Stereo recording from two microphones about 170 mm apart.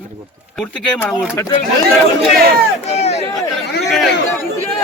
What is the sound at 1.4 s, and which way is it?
Speech, 15° left (ahead or behind).